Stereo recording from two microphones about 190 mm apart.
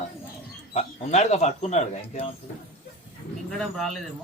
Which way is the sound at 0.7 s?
35° left (ahead or behind).